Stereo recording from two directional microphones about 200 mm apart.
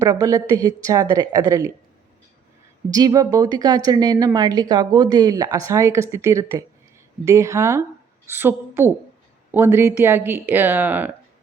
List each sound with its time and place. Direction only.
0.0 s a woman's voice: 15° right (ahead or behind)
2.9 s a woman's voice: 20° right (ahead or behind)